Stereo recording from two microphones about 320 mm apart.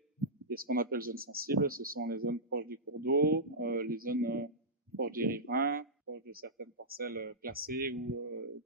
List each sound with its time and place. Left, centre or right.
0.5 s speech: right